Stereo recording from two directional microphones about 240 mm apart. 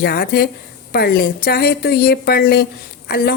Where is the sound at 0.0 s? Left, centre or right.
Left.